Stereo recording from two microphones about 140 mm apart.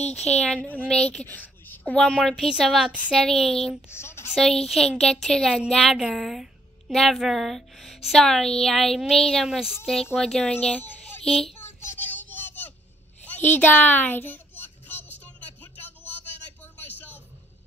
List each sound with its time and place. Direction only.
0.1 s a woman's voice: 5° left (ahead or behind)
2.1 s a woman's voice: centre (ahead or behind)
3.9 s a woman's voice: 15° left (ahead or behind)
4.3 s a woman's voice: 5° left (ahead or behind)
11.5 s child singing: 15° left (ahead or behind)
13.2 s a sound: 15° left (ahead or behind)